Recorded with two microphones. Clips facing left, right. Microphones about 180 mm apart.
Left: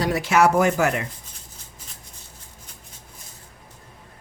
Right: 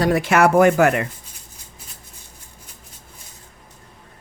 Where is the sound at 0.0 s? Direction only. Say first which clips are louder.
Right 3 dB; 55° right (ahead or behind).